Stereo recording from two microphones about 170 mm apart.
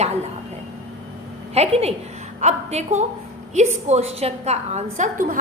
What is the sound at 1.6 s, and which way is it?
A woman's voice, 40° right (ahead or behind).